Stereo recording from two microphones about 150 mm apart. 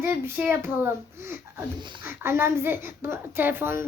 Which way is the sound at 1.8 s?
30° right (ahead or behind).